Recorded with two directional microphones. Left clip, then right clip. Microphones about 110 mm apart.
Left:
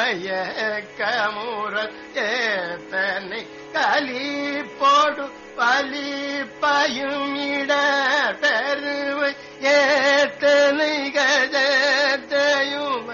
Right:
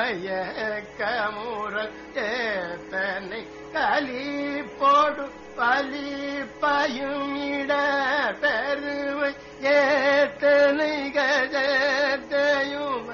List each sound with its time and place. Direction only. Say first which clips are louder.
0.0 s music: left 4 dB; 30° right (ahead or behind)